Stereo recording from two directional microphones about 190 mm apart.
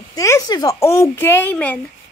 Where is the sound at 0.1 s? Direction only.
15° left (ahead or behind).